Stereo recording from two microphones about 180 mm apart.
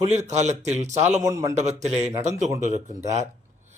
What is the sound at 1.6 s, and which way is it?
Speech, 40° right (ahead or behind).